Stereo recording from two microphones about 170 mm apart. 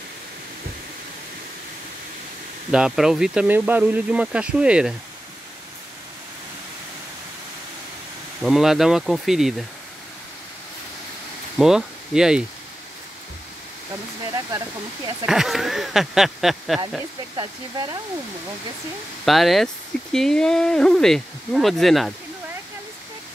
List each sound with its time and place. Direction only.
2.7 s speech: 5° right (ahead or behind)
8.4 s speech: centre (ahead or behind)
11.5 s speech: 5° right (ahead or behind)
15.2 s speech: centre (ahead or behind)
17.4 s speech: 25° right (ahead or behind)
19.2 s speech: centre (ahead or behind)